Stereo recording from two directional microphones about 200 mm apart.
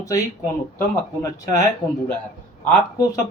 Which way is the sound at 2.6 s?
15° left (ahead or behind).